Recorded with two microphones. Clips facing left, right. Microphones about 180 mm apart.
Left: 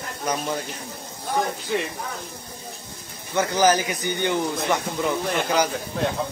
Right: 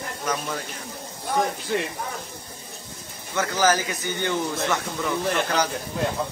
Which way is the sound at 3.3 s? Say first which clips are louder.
Left 3 dB; 20° left (ahead or behind).